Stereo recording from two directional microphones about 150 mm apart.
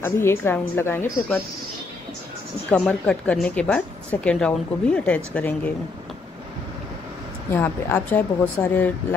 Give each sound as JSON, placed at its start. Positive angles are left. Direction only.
{"t": 0.0, "sound": "a woman's voice", "side_deg": 15}
{"t": 2.7, "sound": "a woman's voice", "side_deg": 5}
{"t": 7.5, "sound": "a woman's voice", "side_deg": 15}